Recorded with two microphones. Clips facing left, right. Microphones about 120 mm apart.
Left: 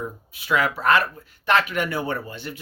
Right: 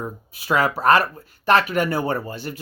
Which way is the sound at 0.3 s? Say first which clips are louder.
Right 2 dB; 40° right (ahead or behind).